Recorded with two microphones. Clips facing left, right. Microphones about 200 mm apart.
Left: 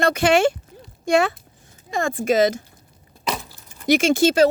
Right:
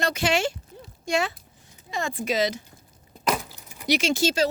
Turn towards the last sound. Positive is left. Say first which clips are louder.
# left 7 dB
turn(degrees=55)  # may be behind; listen again after turning